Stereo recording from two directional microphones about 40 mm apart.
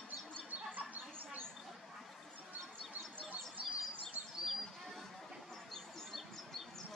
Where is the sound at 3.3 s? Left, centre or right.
Right.